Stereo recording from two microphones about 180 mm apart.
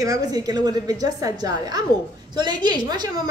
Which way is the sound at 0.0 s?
20° right (ahead or behind).